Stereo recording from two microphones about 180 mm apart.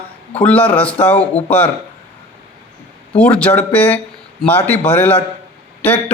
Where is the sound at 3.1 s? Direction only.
5° left (ahead or behind).